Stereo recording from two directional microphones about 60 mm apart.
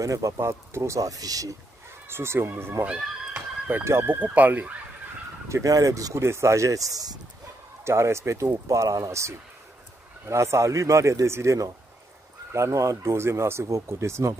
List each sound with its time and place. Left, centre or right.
0.0 s speech: right
0.4 s speech: right
2.0 s speech: right
2.8 s run: right
4.0 s speech: right
5.5 s speech: right
6.2 s speech: right
7.8 s speech: right
8.6 s speech: right
10.2 s speech: right
12.5 s speech: right